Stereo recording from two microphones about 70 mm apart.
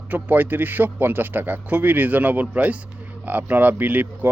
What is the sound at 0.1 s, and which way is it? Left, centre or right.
Speech, right.